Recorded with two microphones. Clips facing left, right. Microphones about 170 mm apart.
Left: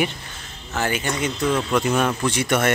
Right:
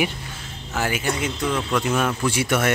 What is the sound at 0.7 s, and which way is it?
Speech, 5° right (ahead or behind).